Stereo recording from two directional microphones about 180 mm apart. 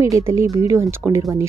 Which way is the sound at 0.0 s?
15° right (ahead or behind).